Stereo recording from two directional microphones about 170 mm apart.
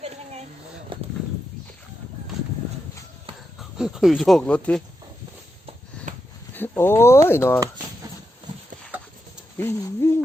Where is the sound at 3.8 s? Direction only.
Centre (ahead or behind).